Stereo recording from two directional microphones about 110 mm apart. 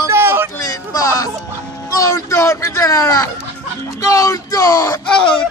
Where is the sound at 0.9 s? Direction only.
30° left (ahead or behind).